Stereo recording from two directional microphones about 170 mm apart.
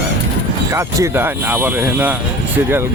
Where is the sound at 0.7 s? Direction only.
15° right (ahead or behind).